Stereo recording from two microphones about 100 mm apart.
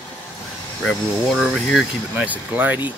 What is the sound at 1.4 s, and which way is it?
Speech, centre (ahead or behind).